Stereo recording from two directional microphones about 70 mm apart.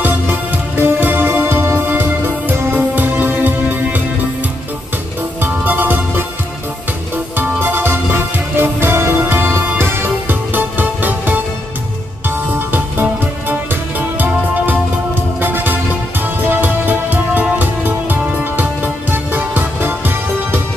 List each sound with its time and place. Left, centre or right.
0.0 s music: right
5.4 s music: right
7.3 s music: right
12.4 s music: right